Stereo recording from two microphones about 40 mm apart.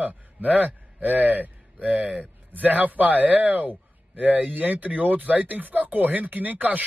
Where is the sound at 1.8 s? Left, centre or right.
Right.